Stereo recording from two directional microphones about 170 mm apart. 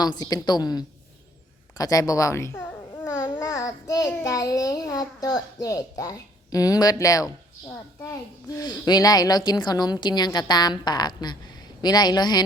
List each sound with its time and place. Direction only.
0.0 s a child's voice: 25° left (ahead or behind)